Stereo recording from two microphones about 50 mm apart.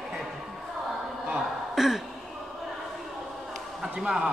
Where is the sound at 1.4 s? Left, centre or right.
Centre.